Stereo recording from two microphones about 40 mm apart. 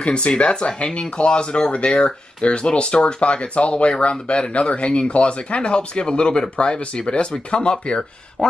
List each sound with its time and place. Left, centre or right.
0.0 s speech: left